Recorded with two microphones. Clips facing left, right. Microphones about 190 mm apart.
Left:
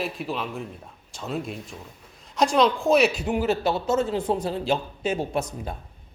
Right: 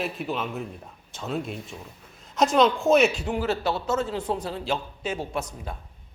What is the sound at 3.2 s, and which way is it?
A man's voice, 15° left (ahead or behind).